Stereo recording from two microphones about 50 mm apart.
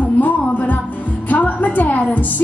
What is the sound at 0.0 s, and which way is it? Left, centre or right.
Music, left.